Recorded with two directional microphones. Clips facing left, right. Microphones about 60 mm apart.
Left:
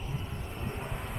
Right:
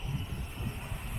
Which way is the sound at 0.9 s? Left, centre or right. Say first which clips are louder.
Left 5 dB; left.